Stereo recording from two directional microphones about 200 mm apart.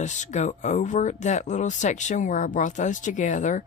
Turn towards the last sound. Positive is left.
turn(degrees=40)  # may be behind; listen again after turning